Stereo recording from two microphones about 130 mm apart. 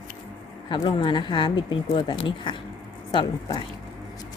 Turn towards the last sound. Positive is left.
turn(degrees=35)  # may be behind; listen again after turning